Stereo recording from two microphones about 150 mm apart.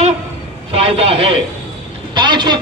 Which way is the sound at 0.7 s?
40° right (ahead or behind).